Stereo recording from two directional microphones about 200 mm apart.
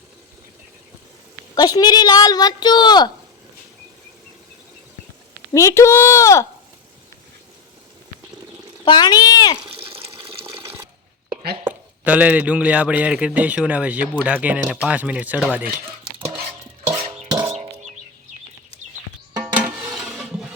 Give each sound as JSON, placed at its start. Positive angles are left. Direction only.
{"t": 1.5, "sound": "speech", "side_deg": 20}
{"t": 5.5, "sound": "speech", "side_deg": 15}
{"t": 8.8, "sound": "speech", "side_deg": 20}
{"t": 9.6, "sound": "water", "side_deg": -25}
{"t": 11.6, "sound": "a man's voice", "side_deg": -10}
{"t": 17.2, "sound": "a sound", "side_deg": -20}
{"t": 19.5, "sound": "a sound", "side_deg": -5}